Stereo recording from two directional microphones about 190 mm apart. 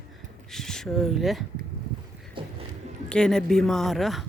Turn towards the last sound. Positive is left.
turn(degrees=0)  # may be behind; listen again after turning